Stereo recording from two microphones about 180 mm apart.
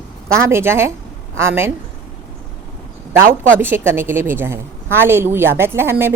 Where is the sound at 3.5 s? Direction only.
10° right (ahead or behind).